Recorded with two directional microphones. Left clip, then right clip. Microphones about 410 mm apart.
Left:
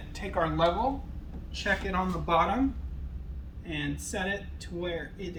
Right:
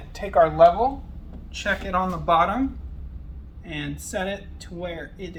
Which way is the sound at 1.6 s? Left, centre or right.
Centre.